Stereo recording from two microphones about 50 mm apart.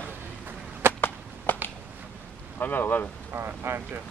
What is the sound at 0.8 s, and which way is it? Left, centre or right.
Chop, right.